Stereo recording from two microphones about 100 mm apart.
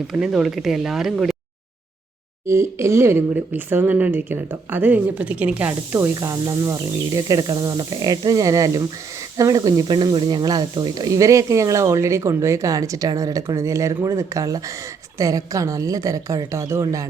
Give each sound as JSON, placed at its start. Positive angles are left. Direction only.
{"t": 0.1, "sound": "speech", "side_deg": -5}
{"t": 2.5, "sound": "speech", "side_deg": -30}
{"t": 6.0, "sound": "speech", "side_deg": -35}